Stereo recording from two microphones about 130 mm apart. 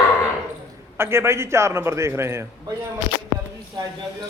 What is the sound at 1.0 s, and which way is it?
A man's voice, 20° right (ahead or behind).